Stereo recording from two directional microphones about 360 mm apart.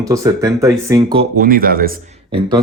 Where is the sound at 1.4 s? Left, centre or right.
Right.